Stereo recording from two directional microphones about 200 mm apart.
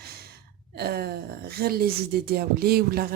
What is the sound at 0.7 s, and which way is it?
Speech, 50° right (ahead or behind).